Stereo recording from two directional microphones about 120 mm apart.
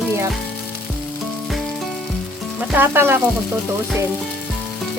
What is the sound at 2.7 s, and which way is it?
Frying, 20° right (ahead or behind).